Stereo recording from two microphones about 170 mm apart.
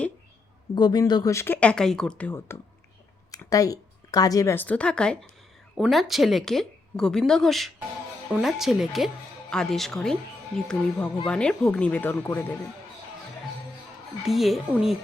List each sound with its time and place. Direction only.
0.8 s a woman's voice: 25° left (ahead or behind)
14.3 s speech: centre (ahead or behind)